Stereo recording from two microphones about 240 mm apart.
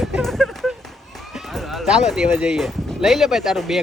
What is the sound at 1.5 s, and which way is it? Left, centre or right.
Speech, centre.